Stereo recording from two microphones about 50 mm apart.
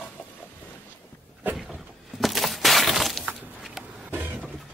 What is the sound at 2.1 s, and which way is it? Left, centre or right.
Breaking, centre.